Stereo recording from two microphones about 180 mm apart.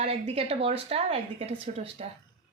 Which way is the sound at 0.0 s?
35° right (ahead or behind).